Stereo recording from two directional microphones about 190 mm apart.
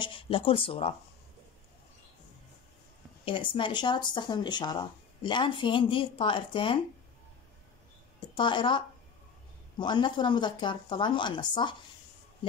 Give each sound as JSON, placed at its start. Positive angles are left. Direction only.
{"t": 0.0, "sound": "speech", "side_deg": 25}
{"t": 3.5, "sound": "speech", "side_deg": 25}
{"t": 8.4, "sound": "speech", "side_deg": 25}